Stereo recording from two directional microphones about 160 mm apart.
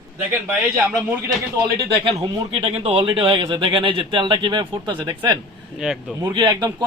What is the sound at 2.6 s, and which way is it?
Speech, 35° right (ahead or behind).